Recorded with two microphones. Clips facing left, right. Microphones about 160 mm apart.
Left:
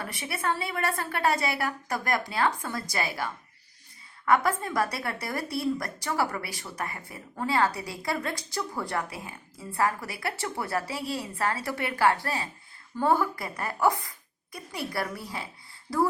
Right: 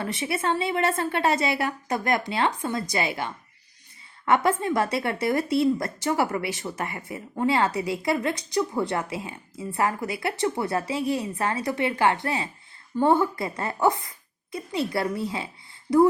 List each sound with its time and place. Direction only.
0.3 s a woman's voice: 25° right (ahead or behind)
4.3 s a woman's voice: 25° right (ahead or behind)